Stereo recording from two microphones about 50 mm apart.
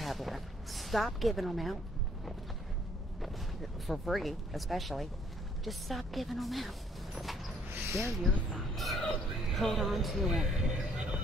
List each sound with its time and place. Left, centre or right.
0.0 s a woman's voice: centre
3.8 s speech: centre
7.2 s a sound: centre
7.8 s speech: right
8.2 s speech: centre